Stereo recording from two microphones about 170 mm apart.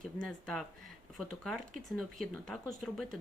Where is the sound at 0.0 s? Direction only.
5° left (ahead or behind).